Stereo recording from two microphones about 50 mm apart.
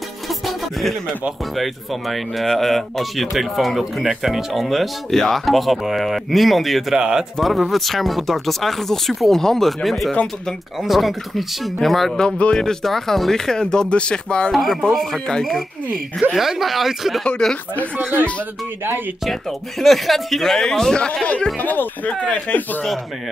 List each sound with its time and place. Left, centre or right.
0.5 s music: centre
1.6 s speech: centre
7.0 s speech: centre
7.3 s speech: centre
12.3 s speech: left
12.5 s speech: centre
14.5 s speech: centre
16.3 s speech: centre
17.4 s speech: centre
19.8 s speech: centre; by 21.5 s left
21.5 s speech: left